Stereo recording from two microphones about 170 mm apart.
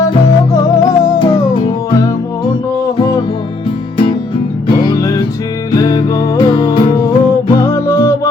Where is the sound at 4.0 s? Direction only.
30° left (ahead or behind).